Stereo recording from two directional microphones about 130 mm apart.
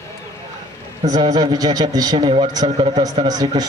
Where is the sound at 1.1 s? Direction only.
30° right (ahead or behind).